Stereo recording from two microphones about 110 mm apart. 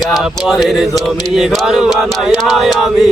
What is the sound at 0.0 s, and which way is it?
Chant, 5° right (ahead or behind).